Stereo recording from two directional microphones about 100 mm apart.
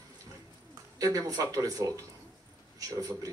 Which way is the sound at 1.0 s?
35° right (ahead or behind).